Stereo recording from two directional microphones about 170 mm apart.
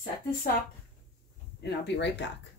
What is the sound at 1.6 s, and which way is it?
Speech, 90° left.